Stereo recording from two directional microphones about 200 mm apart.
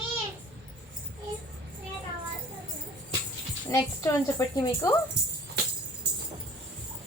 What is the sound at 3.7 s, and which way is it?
Speech, 15° left (ahead or behind).